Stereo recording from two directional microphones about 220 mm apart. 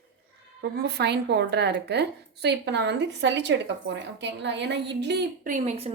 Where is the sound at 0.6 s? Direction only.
50° right (ahead or behind).